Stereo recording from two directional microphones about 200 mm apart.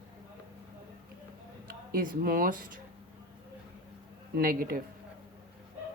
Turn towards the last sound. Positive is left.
turn(degrees=-45)  # may be behind; listen again after turning